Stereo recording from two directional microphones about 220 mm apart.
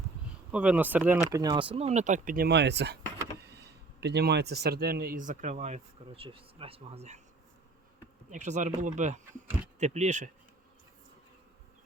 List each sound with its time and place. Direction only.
0.5 s speech: 5° right (ahead or behind); by 7.2 s 30° right (ahead or behind)
8.3 s speech: 35° right (ahead or behind)